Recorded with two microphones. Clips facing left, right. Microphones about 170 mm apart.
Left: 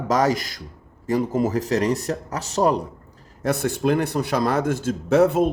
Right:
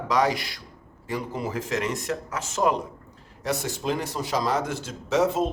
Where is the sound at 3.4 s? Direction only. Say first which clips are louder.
Left 7 dB; 55° left (ahead or behind).